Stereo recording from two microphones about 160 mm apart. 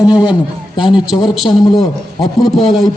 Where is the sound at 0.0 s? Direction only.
25° left (ahead or behind).